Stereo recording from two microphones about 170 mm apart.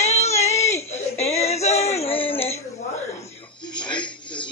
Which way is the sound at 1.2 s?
40° left (ahead or behind).